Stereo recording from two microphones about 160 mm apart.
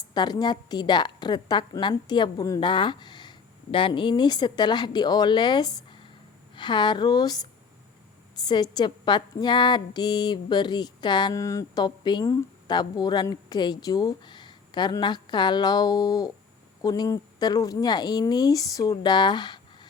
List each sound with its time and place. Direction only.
0.1 s a woman's voice: 25° left (ahead or behind)
8.4 s a woman's voice: 25° left (ahead or behind)